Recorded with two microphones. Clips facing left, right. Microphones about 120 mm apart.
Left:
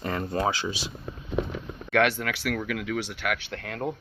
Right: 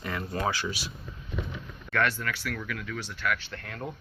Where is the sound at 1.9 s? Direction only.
80° left.